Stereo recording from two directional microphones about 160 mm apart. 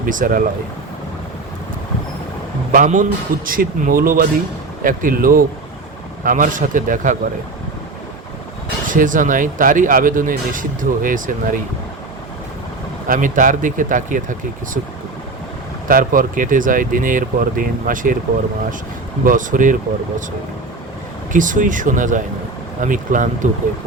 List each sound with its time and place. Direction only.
0.0 s speech: 60° right (ahead or behind)
2.7 s speech: 55° right (ahead or behind)
8.9 s speech: 55° right (ahead or behind)
13.1 s speech: 55° right (ahead or behind)
15.9 s speech: 60° right (ahead or behind)
19.2 s speech: 55° right (ahead or behind)
21.3 s speech: 55° right (ahead or behind)